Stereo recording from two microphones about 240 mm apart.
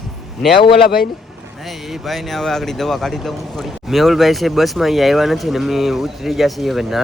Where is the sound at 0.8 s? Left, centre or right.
Left.